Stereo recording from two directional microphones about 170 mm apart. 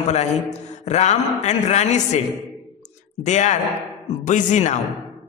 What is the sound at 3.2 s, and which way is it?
A man's voice, 45° left (ahead or behind).